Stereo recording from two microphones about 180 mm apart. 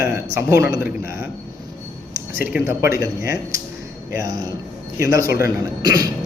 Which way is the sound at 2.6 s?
15° right (ahead or behind).